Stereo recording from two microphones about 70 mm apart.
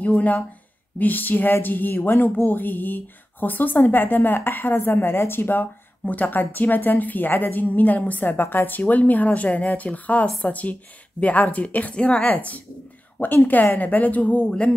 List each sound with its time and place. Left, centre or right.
0.0 s speech: left